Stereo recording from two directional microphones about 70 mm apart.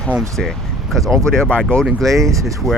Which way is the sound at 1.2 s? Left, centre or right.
Centre.